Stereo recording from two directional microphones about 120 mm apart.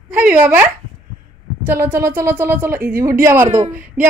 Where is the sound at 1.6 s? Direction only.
20° right (ahead or behind).